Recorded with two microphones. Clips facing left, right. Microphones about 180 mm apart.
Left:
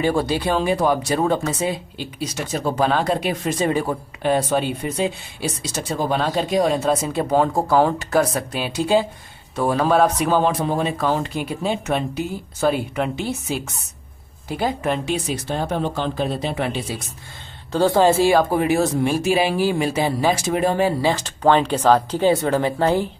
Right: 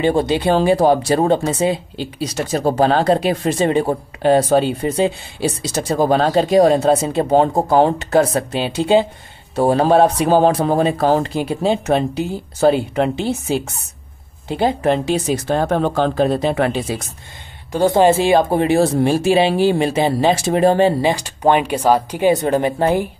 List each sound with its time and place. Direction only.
0.0 s speech: 25° right (ahead or behind)
14.8 s speech: 35° right (ahead or behind)
17.7 s speech: 20° right (ahead or behind)
21.0 s speech: 15° right (ahead or behind)